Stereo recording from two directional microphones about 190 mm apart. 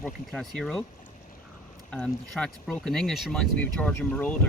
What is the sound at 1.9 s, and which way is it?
Speech, 5° left (ahead or behind).